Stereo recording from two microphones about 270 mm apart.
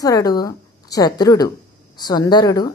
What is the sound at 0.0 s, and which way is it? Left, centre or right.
A woman's voice, centre.